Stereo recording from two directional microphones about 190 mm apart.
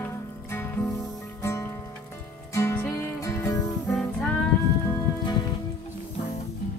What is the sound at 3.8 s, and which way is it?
Music, centre (ahead or behind).